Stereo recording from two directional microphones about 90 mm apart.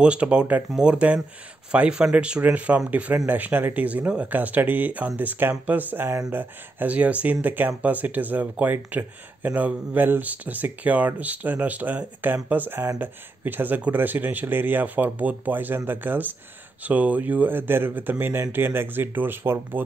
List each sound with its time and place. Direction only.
0.0 s speech: 10° right (ahead or behind)